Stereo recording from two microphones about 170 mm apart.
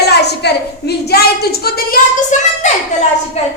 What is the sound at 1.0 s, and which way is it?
A woman's voice, 70° left (ahead or behind).